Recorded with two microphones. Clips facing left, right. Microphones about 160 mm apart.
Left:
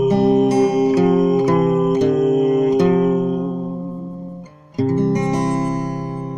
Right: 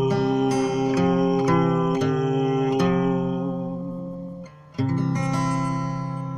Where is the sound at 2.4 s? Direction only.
45° left (ahead or behind).